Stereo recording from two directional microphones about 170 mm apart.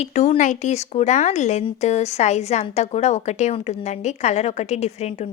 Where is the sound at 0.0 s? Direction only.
40° left (ahead or behind).